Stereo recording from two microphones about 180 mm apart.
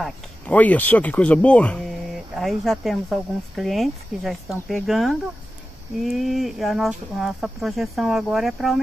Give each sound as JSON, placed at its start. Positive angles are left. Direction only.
{"t": 0.0, "sound": "speech", "side_deg": 10}